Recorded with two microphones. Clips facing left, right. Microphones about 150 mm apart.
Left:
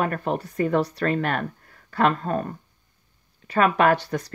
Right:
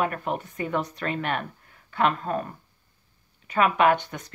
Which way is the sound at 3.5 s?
40° left (ahead or behind).